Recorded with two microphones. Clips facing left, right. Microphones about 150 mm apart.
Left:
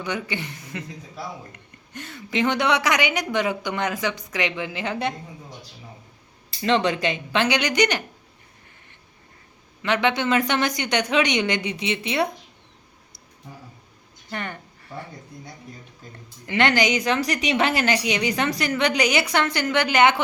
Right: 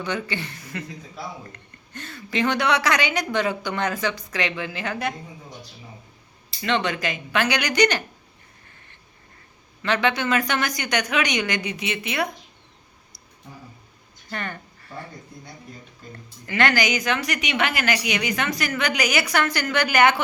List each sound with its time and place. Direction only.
0.0 s a woman's voice: 15° left (ahead or behind)
6.6 s speech: 30° left (ahead or behind)
9.8 s speech: 20° left (ahead or behind)
14.3 s a sound: 15° left (ahead or behind)
16.5 s speech: 25° left (ahead or behind)